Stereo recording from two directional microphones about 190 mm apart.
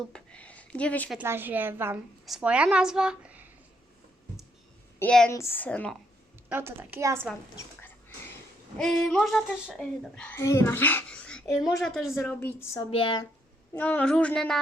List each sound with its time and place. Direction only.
0.1 s a sound: 5° left (ahead or behind)
1.2 s a woman's voice: 10° right (ahead or behind)
4.9 s a woman's voice: 5° left (ahead or behind)
6.5 s a woman's voice: 10° right (ahead or behind)
8.8 s speech: centre (ahead or behind)
12.3 s a woman's voice: 10° left (ahead or behind)
12.9 s speech: 25° left (ahead or behind)
13.7 s speech: 5° left (ahead or behind)